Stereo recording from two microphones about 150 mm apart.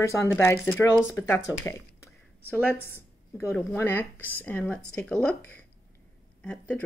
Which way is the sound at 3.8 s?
15° left (ahead or behind).